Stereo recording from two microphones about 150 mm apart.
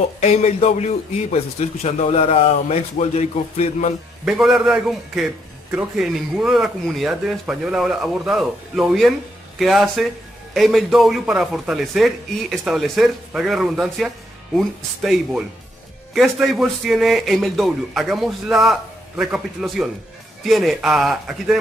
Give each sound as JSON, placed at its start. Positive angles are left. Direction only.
{"t": 0.2, "sound": "a man's voice", "side_deg": 45}
{"t": 4.2, "sound": "a man's voice", "side_deg": 0}